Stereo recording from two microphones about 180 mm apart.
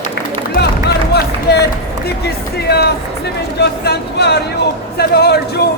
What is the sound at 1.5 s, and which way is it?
Speech, 65° left (ahead or behind).